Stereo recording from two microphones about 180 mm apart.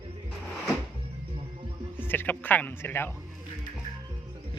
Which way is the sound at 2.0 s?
10° left (ahead or behind).